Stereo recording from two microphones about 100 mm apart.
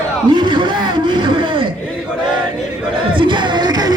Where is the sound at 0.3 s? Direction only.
50° right (ahead or behind).